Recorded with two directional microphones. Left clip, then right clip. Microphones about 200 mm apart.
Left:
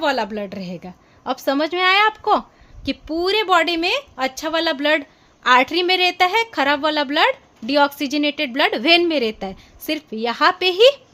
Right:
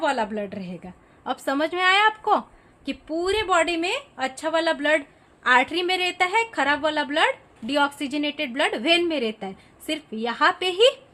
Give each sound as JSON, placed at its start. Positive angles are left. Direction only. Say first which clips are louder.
{"t": 0.0, "sound": "a woman's voice", "louder": "left 3 dB", "side_deg": 55}
{"t": 1.2, "sound": "a woman's voice", "louder": "left 4 dB", "side_deg": 40}
{"t": 2.8, "sound": "a woman's voice", "louder": "left 4 dB", "side_deg": 50}